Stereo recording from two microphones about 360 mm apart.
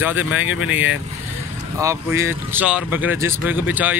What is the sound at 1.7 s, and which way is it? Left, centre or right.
A man's voice, centre.